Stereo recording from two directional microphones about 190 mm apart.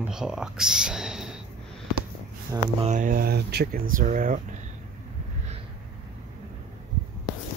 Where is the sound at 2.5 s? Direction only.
20° right (ahead or behind).